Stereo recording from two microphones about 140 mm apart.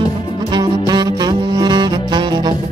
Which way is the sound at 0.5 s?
30° right (ahead or behind).